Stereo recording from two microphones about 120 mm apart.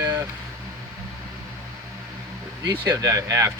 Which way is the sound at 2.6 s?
30° right (ahead or behind).